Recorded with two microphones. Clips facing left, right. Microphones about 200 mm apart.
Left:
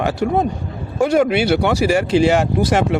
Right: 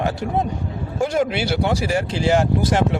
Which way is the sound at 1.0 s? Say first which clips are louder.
Left 6 dB; 65° left (ahead or behind).